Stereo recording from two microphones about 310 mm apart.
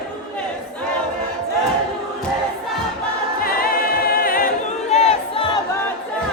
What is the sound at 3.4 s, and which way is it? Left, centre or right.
A capella, left.